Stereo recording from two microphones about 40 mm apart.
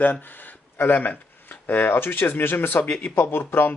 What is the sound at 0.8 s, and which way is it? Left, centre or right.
Speech, left.